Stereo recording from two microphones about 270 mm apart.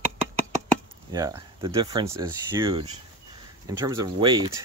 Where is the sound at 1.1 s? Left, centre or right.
Centre.